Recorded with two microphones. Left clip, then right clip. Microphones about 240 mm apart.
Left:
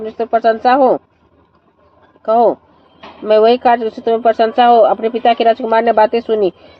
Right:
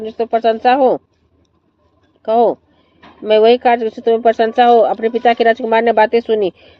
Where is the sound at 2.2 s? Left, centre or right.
Right.